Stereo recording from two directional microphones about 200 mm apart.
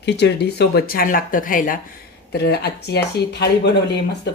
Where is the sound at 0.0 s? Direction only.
55° left (ahead or behind).